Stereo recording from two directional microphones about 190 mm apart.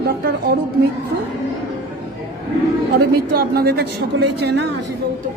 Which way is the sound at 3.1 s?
55° right (ahead or behind).